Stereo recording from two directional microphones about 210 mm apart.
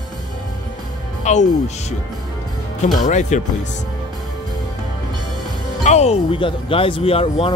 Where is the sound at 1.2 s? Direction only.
35° left (ahead or behind).